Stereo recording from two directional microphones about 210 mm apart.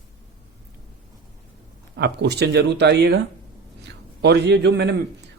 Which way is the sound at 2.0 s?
50° right (ahead or behind).